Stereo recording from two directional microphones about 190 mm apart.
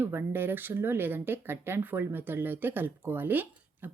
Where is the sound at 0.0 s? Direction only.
10° right (ahead or behind).